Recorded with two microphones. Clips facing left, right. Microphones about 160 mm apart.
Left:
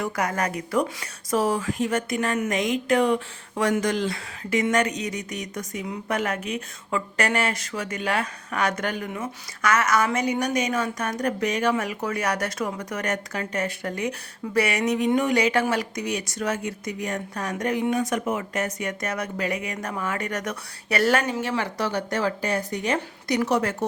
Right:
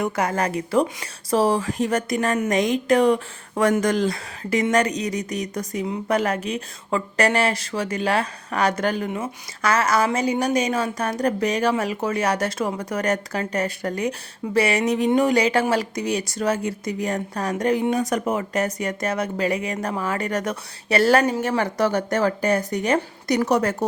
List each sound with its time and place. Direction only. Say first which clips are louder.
0.0 s a woman's voice: right 3 dB; 30° right (ahead or behind)